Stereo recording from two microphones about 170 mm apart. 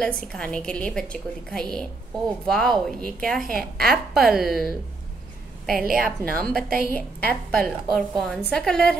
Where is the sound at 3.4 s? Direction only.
60° right (ahead or behind).